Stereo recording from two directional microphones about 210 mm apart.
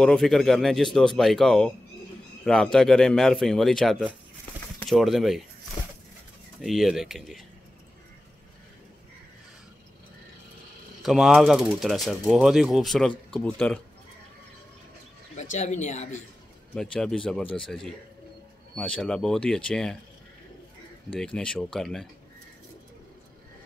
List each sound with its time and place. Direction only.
0.0 s speech: centre (ahead or behind)
6.6 s speech: centre (ahead or behind)
11.0 s speech: centre (ahead or behind)
15.5 s speech: 35° left (ahead or behind)
16.7 s speech: 5° left (ahead or behind)
21.1 s speech: 5° left (ahead or behind)